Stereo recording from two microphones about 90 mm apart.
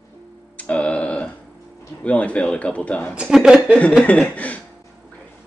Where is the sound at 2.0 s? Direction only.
15° left (ahead or behind).